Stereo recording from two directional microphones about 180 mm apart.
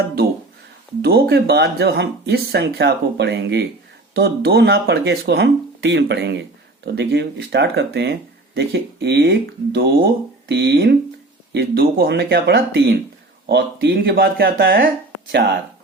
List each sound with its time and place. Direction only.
1.0 s speech: 65° right (ahead or behind)
15.3 s speech: 65° right (ahead or behind)